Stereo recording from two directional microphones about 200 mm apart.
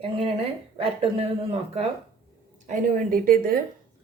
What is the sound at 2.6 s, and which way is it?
Speech, 40° right (ahead or behind).